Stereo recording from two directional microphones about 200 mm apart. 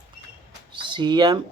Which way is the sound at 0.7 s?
25° right (ahead or behind).